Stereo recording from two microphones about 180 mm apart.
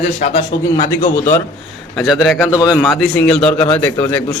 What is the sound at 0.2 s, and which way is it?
Speech, 40° left (ahead or behind).